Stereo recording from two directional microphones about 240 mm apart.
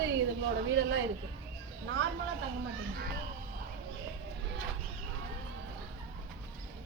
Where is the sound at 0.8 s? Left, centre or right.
Right.